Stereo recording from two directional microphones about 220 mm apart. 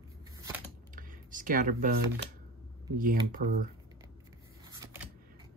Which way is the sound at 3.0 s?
40° right (ahead or behind).